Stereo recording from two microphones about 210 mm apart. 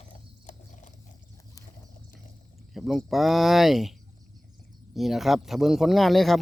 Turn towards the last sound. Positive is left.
turn(degrees=0)  # may be behind; listen again after turning